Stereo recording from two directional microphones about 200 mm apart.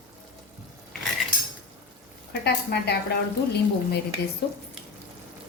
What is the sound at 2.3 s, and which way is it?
Speech, 55° left (ahead or behind).